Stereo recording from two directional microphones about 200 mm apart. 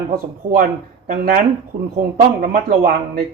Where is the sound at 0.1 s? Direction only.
45° right (ahead or behind).